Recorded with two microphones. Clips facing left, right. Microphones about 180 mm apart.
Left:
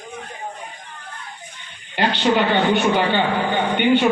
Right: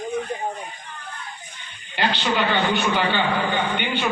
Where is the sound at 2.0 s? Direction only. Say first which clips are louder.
Left 4 dB; 50° left (ahead or behind).